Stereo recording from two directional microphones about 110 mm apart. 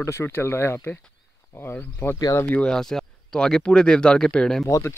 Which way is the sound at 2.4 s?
10° left (ahead or behind).